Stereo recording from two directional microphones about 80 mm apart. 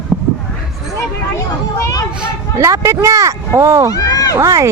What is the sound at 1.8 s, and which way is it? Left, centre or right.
Speech, left.